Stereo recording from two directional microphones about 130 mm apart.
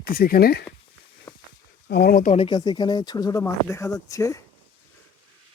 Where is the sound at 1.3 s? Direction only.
35° left (ahead or behind).